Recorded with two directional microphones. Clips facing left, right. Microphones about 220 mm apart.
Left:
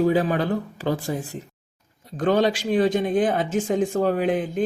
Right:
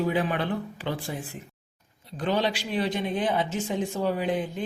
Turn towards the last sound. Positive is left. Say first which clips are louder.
# left 6 dB
turn(degrees=50)  # may be behind; listen again after turning